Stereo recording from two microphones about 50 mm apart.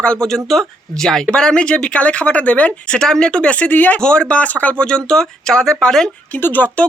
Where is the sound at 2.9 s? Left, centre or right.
Centre; by 4.0 s left.